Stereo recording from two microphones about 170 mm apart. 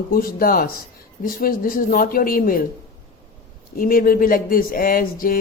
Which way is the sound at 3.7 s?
60° left (ahead or behind).